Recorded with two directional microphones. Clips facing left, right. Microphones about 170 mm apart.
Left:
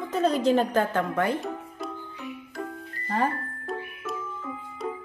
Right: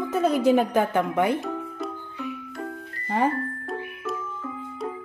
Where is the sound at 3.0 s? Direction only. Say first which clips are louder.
Right 3 dB; 15° right (ahead or behind).